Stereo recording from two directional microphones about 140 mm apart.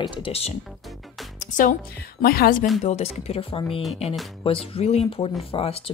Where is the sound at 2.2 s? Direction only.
90° left.